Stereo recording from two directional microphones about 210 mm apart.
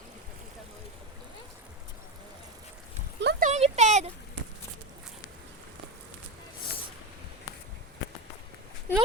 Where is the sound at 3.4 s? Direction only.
35° right (ahead or behind).